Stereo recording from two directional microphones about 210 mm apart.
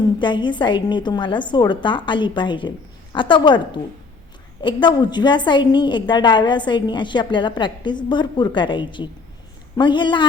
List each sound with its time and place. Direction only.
0.2 s a woman's voice: 20° left (ahead or behind)